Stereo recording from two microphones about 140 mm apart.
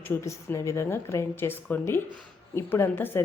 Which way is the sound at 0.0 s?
20° left (ahead or behind).